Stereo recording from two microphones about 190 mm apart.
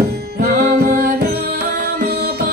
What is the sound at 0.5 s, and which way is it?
Music, 50° right (ahead or behind).